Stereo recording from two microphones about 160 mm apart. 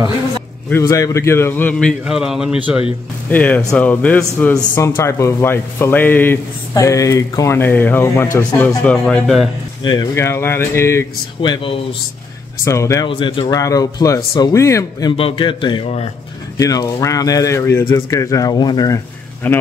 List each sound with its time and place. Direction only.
0.7 s speech: 20° left (ahead or behind); by 2.8 s 5° right (ahead or behind)
3.3 s speech: 10° left (ahead or behind)
10.1 s speech: 15° left (ahead or behind)
12.6 s speech: 20° left (ahead or behind)
13.0 s speech: 30° left (ahead or behind)
15.1 s a man's voice: 35° left (ahead or behind)
16.5 s speech: 20° left (ahead or behind)
19.4 s speech: 10° left (ahead or behind)